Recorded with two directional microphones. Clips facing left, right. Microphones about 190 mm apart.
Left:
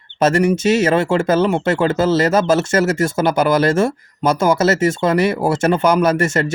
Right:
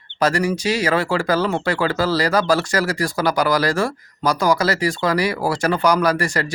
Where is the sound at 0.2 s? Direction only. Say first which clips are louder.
Left 5 dB; 25° left (ahead or behind).